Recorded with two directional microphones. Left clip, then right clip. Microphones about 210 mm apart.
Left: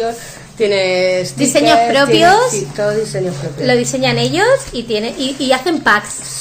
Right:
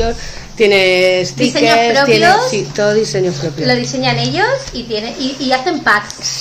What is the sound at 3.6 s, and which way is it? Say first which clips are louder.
A woman's voice: left 1 dB; 55° left (ahead or behind).